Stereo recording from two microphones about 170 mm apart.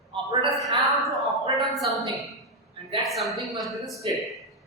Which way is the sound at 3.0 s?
Centre (ahead or behind).